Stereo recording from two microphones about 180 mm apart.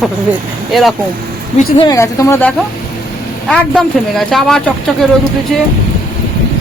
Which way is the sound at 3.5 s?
Centre (ahead or behind).